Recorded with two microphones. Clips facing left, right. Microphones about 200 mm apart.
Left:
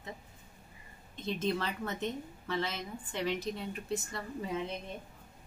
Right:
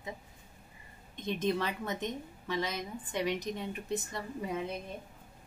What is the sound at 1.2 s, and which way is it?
A woman's voice, 15° right (ahead or behind).